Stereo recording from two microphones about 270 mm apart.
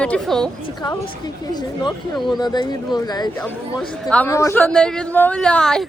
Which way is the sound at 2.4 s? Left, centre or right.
Centre.